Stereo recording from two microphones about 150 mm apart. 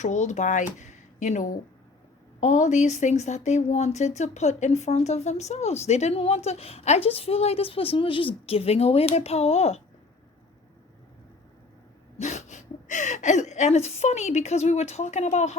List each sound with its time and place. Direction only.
0.0 s speech: 50° left (ahead or behind)
12.1 s speech: 50° left (ahead or behind)